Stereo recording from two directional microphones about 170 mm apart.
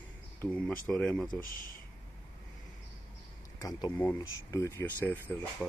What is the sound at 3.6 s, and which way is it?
A man's voice, 20° left (ahead or behind).